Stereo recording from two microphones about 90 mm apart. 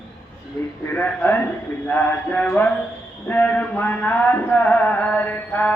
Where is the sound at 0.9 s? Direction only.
20° left (ahead or behind).